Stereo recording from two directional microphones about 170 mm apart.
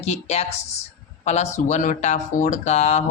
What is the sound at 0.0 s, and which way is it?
A woman's voice, 40° left (ahead or behind).